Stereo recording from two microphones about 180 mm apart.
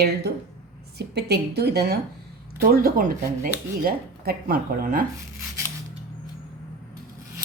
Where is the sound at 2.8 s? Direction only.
50° right (ahead or behind).